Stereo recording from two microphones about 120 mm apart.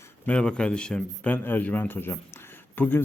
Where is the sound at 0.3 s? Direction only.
10° left (ahead or behind).